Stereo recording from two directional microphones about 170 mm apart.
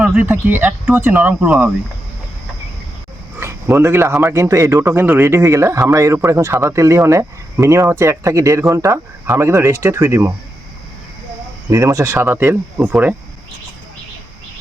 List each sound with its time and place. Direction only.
0.0 s speech: 10° right (ahead or behind)
3.3 s speech: 15° right (ahead or behind)
11.7 s speech: 20° right (ahead or behind)